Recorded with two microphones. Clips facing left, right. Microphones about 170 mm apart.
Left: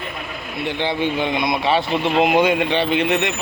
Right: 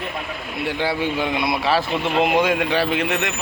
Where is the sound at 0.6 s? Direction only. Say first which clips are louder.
Left 1 dB; 5° right (ahead or behind).